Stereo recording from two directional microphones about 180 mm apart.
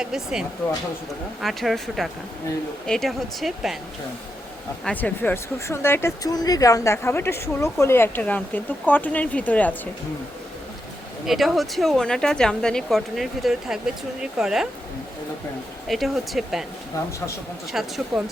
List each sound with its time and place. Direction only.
0.0 s speech: 5° right (ahead or behind)
4.9 s speech: 10° left (ahead or behind)
11.3 s speech: centre (ahead or behind)
15.9 s speech: centre (ahead or behind)
17.7 s speech: centre (ahead or behind)